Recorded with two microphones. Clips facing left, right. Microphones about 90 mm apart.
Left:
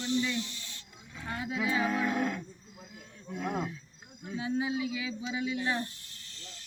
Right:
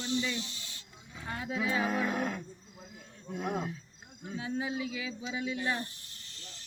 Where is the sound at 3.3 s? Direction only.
25° right (ahead or behind).